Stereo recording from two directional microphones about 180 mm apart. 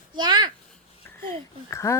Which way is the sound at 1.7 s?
15° left (ahead or behind).